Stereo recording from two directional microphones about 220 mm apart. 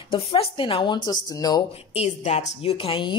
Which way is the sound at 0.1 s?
25° left (ahead or behind).